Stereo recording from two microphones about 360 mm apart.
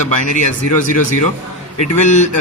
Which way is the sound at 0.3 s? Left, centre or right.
Left.